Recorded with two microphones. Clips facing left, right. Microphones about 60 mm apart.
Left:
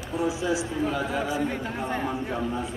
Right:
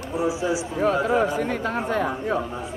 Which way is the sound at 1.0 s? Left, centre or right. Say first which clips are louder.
Right 7 dB; right.